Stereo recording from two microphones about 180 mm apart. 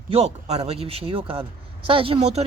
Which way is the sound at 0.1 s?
35° right (ahead or behind).